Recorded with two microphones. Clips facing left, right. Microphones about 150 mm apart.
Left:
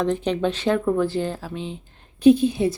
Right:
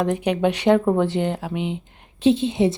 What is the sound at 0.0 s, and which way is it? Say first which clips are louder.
Speech: right 2 dB; 15° right (ahead or behind).